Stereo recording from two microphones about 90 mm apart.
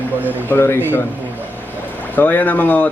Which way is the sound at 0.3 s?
20° left (ahead or behind).